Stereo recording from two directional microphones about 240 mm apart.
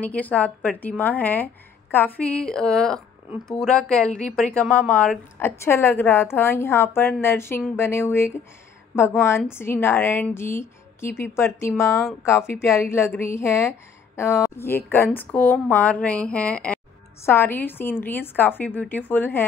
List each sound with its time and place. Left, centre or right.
0.0 s a woman's voice: centre
12.0 s a woman's voice: centre
12.3 s a woman's voice: centre